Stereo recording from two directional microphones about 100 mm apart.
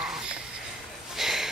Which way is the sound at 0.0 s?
10° right (ahead or behind).